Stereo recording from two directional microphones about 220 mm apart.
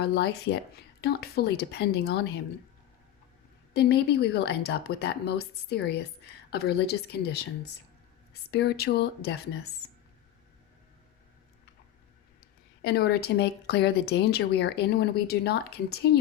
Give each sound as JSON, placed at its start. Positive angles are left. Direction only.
{"t": 0.0, "sound": "speech", "side_deg": 45}
{"t": 3.8, "sound": "speech", "side_deg": 50}
{"t": 12.8, "sound": "speech", "side_deg": 50}